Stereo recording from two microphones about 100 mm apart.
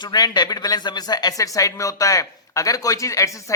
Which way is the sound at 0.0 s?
45° left (ahead or behind).